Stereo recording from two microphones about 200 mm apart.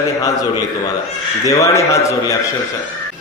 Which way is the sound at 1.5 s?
15° left (ahead or behind).